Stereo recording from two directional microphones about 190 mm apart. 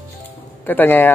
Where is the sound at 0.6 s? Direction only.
10° left (ahead or behind).